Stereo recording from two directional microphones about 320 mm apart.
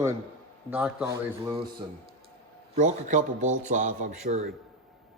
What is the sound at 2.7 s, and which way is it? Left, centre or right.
Speech, right.